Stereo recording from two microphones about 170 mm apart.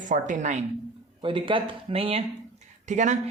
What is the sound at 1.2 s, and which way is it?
Speech, 30° right (ahead or behind).